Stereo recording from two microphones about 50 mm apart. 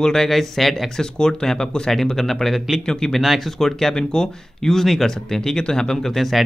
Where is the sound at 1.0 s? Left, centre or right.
Centre.